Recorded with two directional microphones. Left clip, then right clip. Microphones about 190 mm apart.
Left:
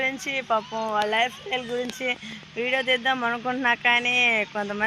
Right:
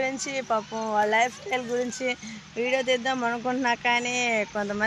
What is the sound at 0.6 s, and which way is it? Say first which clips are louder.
Speech: left 2 dB; 20° left (ahead or behind).